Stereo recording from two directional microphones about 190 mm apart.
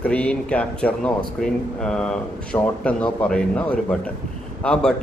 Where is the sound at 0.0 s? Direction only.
5° left (ahead or behind).